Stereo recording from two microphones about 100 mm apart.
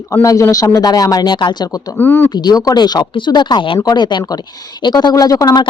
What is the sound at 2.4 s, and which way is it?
Speech, 40° left (ahead or behind).